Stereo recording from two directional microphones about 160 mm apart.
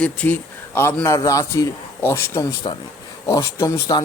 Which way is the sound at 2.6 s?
30° left (ahead or behind).